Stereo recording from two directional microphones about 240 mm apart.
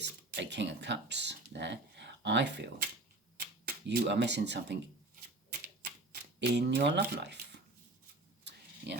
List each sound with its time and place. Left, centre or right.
0.0 s a sound: right
3.3 s speech: right
5.5 s typewriter: right
8.5 s vehicle: right
8.9 s speech: right